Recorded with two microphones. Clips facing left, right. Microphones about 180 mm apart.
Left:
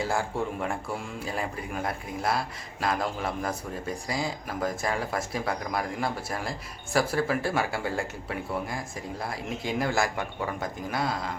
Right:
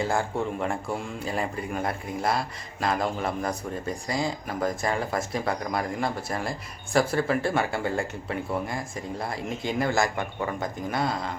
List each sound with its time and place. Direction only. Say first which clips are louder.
0.0 s speech: right 2 dB; 5° left (ahead or behind)